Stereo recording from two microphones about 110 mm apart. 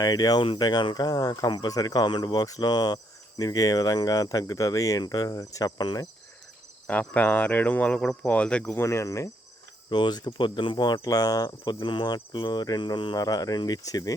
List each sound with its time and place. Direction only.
0.0 s speech: 35° left (ahead or behind)
6.8 s speech: 10° left (ahead or behind)
8.7 s cricket: 25° left (ahead or behind)
9.9 s speech: 40° left (ahead or behind)